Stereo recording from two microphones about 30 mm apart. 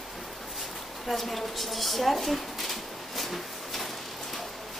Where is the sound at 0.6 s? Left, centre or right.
Centre.